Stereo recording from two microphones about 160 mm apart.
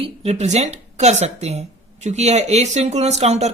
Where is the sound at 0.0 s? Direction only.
40° right (ahead or behind).